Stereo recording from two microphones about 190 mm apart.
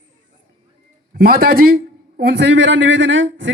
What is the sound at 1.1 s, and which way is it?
A man's voice, 55° right (ahead or behind).